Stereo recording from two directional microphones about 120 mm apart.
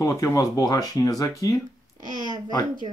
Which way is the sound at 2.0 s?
35° right (ahead or behind).